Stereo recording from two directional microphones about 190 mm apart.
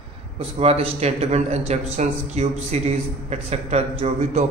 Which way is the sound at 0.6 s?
30° right (ahead or behind).